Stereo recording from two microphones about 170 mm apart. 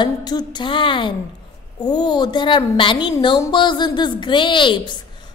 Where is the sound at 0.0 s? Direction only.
25° left (ahead or behind).